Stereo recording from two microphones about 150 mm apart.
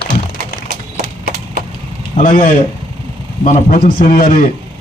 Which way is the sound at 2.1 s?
60° left (ahead or behind).